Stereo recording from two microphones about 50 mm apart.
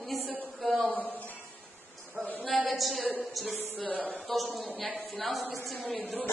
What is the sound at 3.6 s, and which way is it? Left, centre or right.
Speech, left.